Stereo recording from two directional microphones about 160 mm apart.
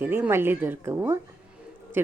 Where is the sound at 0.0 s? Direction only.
15° right (ahead or behind).